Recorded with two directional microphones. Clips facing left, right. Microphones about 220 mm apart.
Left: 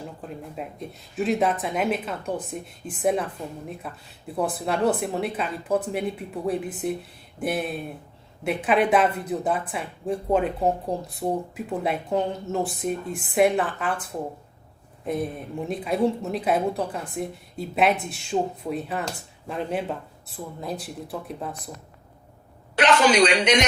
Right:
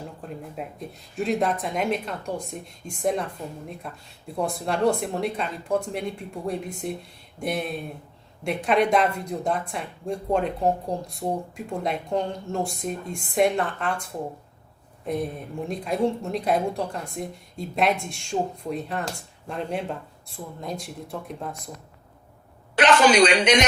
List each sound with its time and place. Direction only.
0.2 s a woman's voice: centre (ahead or behind)
15.0 s a woman's voice: centre (ahead or behind)
22.7 s speech: 50° right (ahead or behind)